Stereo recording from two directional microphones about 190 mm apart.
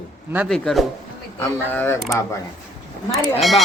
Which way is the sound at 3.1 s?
Centre (ahead or behind).